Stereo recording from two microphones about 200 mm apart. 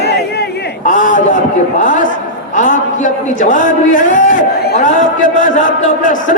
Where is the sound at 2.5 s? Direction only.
40° left (ahead or behind).